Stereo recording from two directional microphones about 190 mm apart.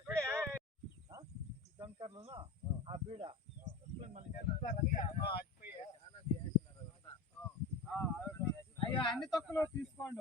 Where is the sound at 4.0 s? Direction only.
35° right (ahead or behind).